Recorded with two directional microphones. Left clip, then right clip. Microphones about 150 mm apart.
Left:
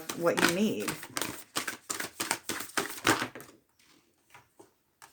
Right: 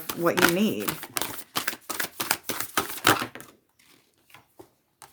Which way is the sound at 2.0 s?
35° right (ahead or behind).